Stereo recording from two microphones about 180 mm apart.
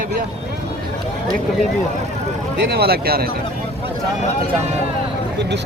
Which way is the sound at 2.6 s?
60° right (ahead or behind).